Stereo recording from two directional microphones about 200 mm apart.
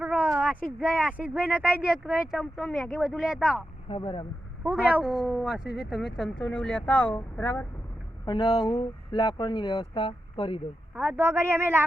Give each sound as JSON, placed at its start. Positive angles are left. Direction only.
{"t": 0.0, "sound": "speech", "side_deg": -5}
{"t": 3.8, "sound": "speech", "side_deg": 25}
{"t": 4.6, "sound": "speech", "side_deg": -10}
{"t": 8.2, "sound": "speech", "side_deg": 20}
{"t": 10.9, "sound": "a man's voice", "side_deg": -10}